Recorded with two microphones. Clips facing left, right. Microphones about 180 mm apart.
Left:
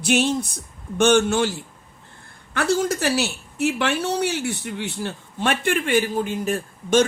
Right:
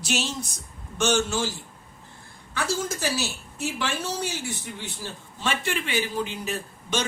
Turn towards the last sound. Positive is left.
turn(degrees=50)  # may be behind; listen again after turning